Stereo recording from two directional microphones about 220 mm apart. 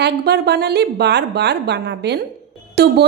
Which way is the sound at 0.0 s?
50° right (ahead or behind).